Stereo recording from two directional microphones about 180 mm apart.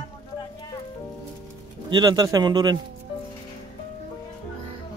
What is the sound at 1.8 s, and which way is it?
Speech, 20° right (ahead or behind).